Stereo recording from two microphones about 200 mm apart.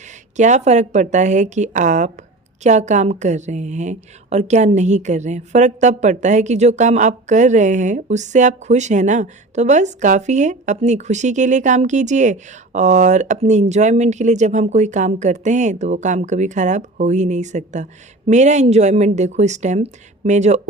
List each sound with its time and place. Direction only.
0.3 s a woman's voice: 35° right (ahead or behind)